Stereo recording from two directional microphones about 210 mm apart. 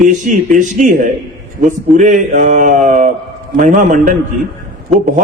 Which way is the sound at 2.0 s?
35° right (ahead or behind).